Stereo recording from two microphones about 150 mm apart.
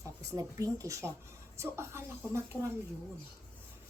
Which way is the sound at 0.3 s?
20° right (ahead or behind).